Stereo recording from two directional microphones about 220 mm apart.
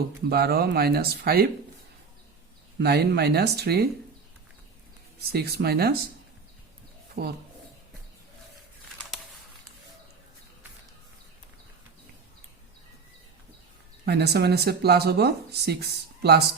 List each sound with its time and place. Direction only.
0.3 s speech: 45° right (ahead or behind)
2.7 s speech: 50° right (ahead or behind)
5.3 s speech: 45° right (ahead or behind)
7.2 s speech: 45° right (ahead or behind)
14.0 s speech: 50° right (ahead or behind)